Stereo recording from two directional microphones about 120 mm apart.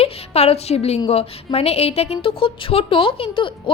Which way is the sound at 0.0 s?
60° left (ahead or behind).